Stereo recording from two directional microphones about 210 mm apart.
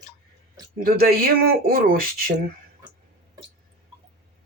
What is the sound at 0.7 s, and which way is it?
Speech, 45° right (ahead or behind).